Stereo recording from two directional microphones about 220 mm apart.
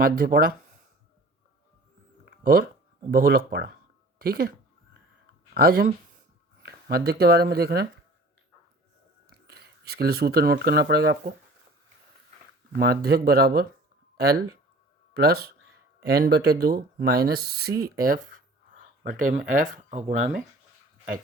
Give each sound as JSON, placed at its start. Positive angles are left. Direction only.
{"t": 0.0, "sound": "speech", "side_deg": -40}
{"t": 2.4, "sound": "speech", "side_deg": -40}
{"t": 5.5, "sound": "speech", "side_deg": -40}
{"t": 9.5, "sound": "speech", "side_deg": -45}
{"t": 12.7, "sound": "speech", "side_deg": -45}
{"t": 19.3, "sound": "speech", "side_deg": -35}